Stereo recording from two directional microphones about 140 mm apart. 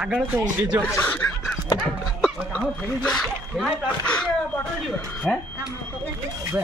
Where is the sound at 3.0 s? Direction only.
5° left (ahead or behind).